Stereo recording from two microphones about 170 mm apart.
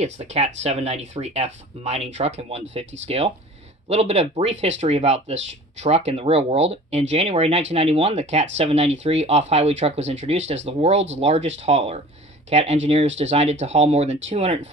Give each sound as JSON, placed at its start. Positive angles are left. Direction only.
{"t": 0.0, "sound": "speech", "side_deg": -40}